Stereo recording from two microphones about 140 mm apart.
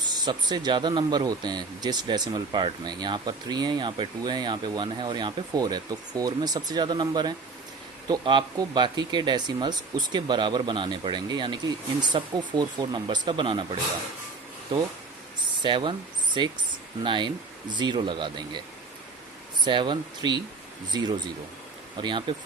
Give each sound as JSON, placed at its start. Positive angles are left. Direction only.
{"t": 0.0, "sound": "speech", "side_deg": -30}
{"t": 15.5, "sound": "speech", "side_deg": -35}
{"t": 19.6, "sound": "speech", "side_deg": -35}